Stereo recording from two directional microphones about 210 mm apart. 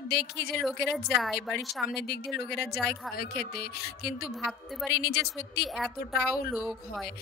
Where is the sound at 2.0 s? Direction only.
50° left (ahead or behind).